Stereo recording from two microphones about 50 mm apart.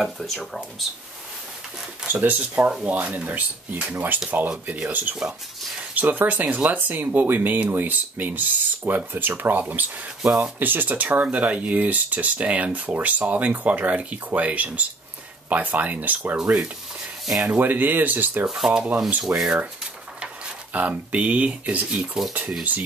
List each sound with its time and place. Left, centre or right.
0.0 s speech: centre
2.2 s speech: right
16.3 s speech: centre
17.6 s speech: right
18.7 s speech: right
19.3 s speech: right
20.7 s speech: right